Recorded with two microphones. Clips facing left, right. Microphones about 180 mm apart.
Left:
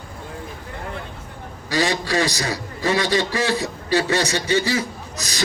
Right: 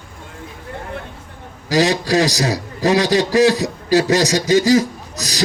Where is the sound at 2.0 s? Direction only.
40° right (ahead or behind).